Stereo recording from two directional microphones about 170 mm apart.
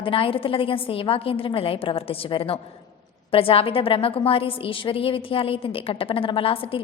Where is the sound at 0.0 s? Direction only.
30° left (ahead or behind).